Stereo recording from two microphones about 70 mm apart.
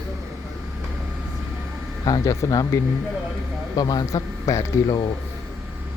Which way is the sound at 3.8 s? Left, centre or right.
Left.